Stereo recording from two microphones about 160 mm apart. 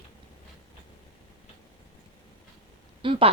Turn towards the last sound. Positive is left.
turn(degrees=-35)  # may be behind; listen again after turning